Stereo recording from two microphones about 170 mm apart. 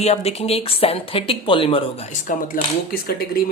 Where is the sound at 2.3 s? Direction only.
50° left (ahead or behind).